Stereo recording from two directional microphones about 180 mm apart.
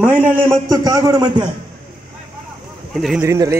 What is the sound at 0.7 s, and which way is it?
Speech, 20° right (ahead or behind).